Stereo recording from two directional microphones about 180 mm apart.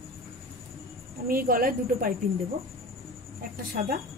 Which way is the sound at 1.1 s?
55° right (ahead or behind).